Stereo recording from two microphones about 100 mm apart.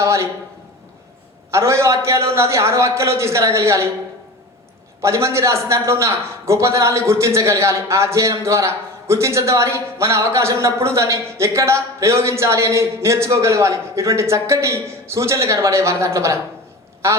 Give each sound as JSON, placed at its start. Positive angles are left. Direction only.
{"t": 0.0, "sound": "a sound", "side_deg": -30}
{"t": 1.5, "sound": "speech", "side_deg": -30}
{"t": 5.0, "sound": "speech", "side_deg": -30}